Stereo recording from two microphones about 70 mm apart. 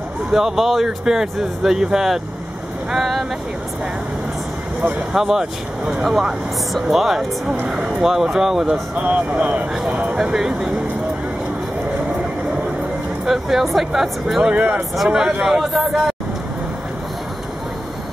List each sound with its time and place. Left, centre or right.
0.3 s speech: centre
4.8 s speech: centre
13.2 s speech: centre
14.5 s speech: centre